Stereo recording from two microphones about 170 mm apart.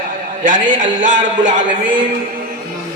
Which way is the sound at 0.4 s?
50° right (ahead or behind).